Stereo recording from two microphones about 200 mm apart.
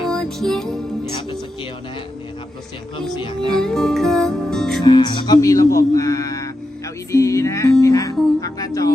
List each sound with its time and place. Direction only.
0.0 s music: centre (ahead or behind)
3.5 s music: 5° left (ahead or behind)
4.8 s speech: 20° left (ahead or behind)
7.1 s music: 15° left (ahead or behind)